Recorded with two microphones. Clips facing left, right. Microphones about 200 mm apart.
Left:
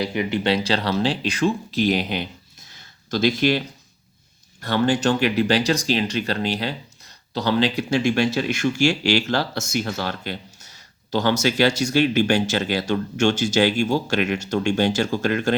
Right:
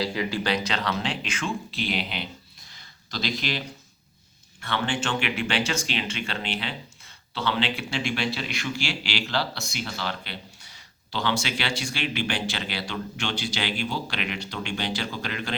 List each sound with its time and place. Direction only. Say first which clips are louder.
0.0 s speech: left 5 dB; 20° left (ahead or behind); by 2.2 s 45° left (ahead or behind)
2.6 s a sound: left 16 dB; 50° left (ahead or behind)
4.6 s speech: left 9 dB; 40° left (ahead or behind)